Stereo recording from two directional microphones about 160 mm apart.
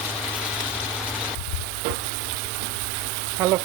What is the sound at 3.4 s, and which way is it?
Speech, 20° right (ahead or behind).